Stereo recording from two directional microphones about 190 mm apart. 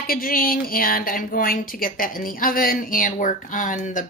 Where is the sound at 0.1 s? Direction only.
50° left (ahead or behind).